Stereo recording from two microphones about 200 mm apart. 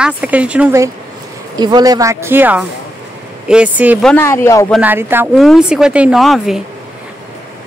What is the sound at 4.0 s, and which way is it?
Speech, 10° left (ahead or behind).